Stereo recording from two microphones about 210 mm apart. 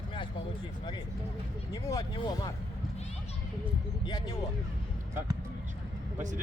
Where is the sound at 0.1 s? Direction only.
25° left (ahead or behind).